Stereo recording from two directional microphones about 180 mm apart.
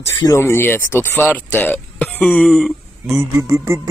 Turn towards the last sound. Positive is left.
turn(degrees=-15)  # may be behind; listen again after turning